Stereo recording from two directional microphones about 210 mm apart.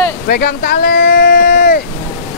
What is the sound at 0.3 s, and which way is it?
Speech, 45° left (ahead or behind).